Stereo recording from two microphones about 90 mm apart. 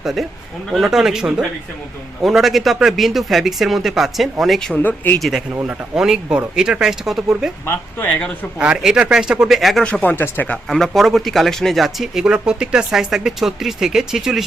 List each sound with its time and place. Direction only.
0.0 s a man's voice: 5° right (ahead or behind)
4.7 s speech: 20° left (ahead or behind)
5.6 s speech: 5° right (ahead or behind)
7.7 s speech: 25° left (ahead or behind)
8.5 s speech: 10° right (ahead or behind)
9.8 s speech: 15° left (ahead or behind)
10.7 s speech: centre (ahead or behind)